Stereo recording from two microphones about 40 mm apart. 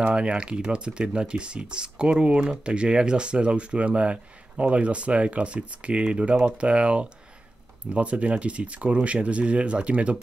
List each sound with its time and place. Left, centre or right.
0.1 s speech: right